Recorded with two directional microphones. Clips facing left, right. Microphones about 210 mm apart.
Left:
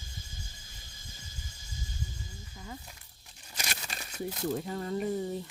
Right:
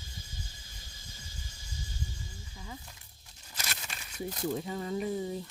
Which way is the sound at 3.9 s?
40° left (ahead or behind).